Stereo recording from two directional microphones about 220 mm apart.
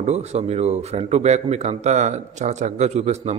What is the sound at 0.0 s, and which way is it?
A man's voice, 30° right (ahead or behind).